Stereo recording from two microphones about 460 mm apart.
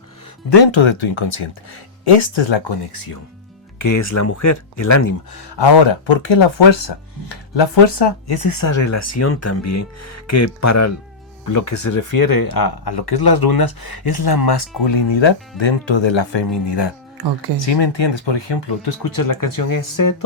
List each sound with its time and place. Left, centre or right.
0.5 s speech: left
2.9 s speech: left
6.1 s speech: left